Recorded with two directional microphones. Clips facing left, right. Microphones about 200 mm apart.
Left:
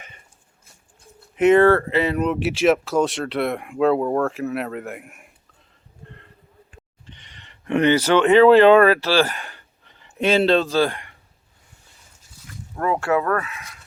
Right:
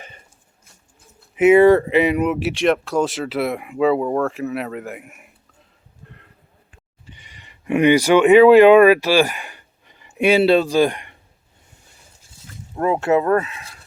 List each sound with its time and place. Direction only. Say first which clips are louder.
1.4 s speech: right 3 dB; 10° right (ahead or behind)
7.1 s speech: right 1 dB; 10° right (ahead or behind)
12.4 s a sound: right 2 dB; 30° right (ahead or behind)
12.8 s speech: right 3 dB; 20° right (ahead or behind)